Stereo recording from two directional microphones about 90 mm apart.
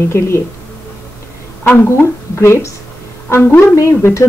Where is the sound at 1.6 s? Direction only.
25° left (ahead or behind).